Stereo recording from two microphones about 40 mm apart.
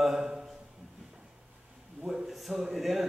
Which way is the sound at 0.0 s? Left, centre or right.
Centre.